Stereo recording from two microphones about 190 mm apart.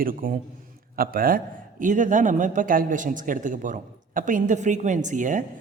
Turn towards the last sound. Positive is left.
turn(degrees=-45)  # may be behind; listen again after turning